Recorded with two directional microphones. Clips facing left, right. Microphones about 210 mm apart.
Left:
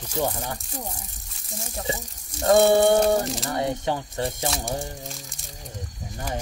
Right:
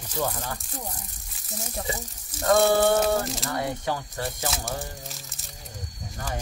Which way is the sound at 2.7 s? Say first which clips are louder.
Left 3 dB; 20° left (ahead or behind).